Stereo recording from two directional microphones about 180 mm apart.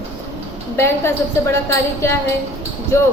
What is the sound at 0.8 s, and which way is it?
A woman's voice, 15° left (ahead or behind).